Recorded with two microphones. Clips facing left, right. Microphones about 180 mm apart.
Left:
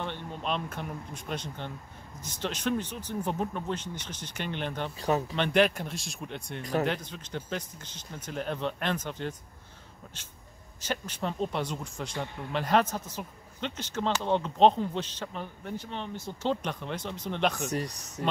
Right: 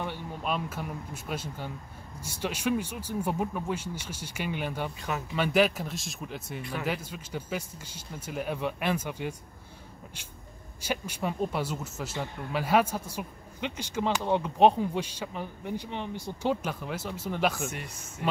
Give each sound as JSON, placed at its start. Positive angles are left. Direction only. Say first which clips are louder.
{"t": 0.0, "sound": "speech", "louder": "right 1 dB", "side_deg": -10}
{"t": 6.6, "sound": "speech", "louder": "left 8 dB", "side_deg": 40}
{"t": 6.9, "sound": "speech", "louder": "even", "side_deg": -10}
{"t": 10.8, "sound": "speech", "louder": "right 1 dB", "side_deg": -10}
{"t": 17.6, "sound": "speech", "louder": "left 6 dB", "side_deg": 40}